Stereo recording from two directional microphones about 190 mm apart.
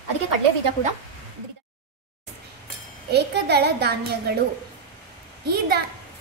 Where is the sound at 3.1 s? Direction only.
60° right (ahead or behind).